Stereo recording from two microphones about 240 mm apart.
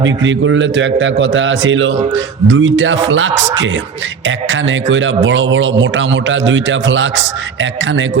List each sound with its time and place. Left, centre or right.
0.0 s a man's voice: right